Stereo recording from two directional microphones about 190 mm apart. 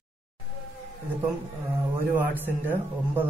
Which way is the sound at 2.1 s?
10° right (ahead or behind).